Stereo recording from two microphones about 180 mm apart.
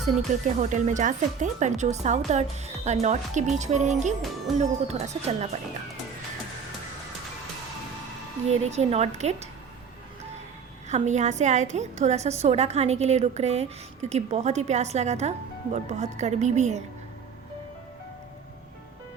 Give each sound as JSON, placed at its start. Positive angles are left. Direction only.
{"t": 0.3, "sound": "a woman's voice", "side_deg": -45}
{"t": 8.4, "sound": "a woman's voice", "side_deg": -35}
{"t": 10.8, "sound": "a woman's voice", "side_deg": -40}